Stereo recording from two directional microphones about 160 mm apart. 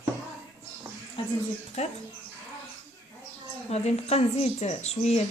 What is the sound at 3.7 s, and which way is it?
A woman's voice, 40° left (ahead or behind).